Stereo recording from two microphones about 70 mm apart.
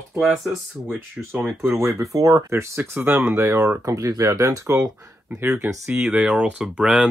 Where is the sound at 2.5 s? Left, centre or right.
Right.